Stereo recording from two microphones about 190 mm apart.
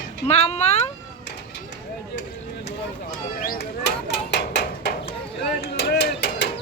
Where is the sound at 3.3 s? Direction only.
50° left (ahead or behind).